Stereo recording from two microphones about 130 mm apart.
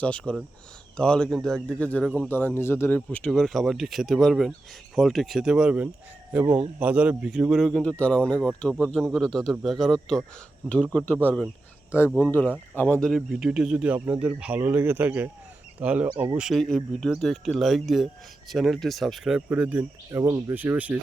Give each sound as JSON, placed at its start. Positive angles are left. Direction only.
{"t": 0.0, "sound": "a man's voice", "side_deg": 10}
{"t": 10.9, "sound": "a man's voice", "side_deg": 15}
{"t": 16.4, "sound": "speech", "side_deg": 0}
{"t": 19.5, "sound": "speech", "side_deg": -15}
{"t": 20.1, "sound": "speech", "side_deg": -25}
{"t": 20.5, "sound": "speech", "side_deg": -15}